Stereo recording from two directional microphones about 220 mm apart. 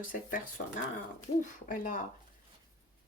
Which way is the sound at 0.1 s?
40° left (ahead or behind).